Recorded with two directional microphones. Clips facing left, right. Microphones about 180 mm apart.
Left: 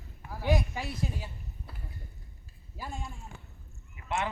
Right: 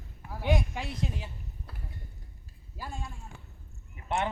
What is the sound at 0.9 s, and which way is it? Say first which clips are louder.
Speech: even; 20° right (ahead or behind).